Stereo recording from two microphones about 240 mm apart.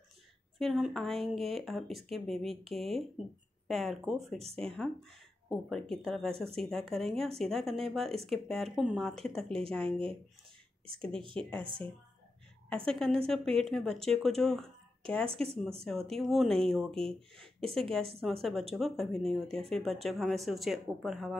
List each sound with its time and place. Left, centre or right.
0.6 s speech: centre
9.8 s speech: right
11.6 s speech: right
12.6 s speech: centre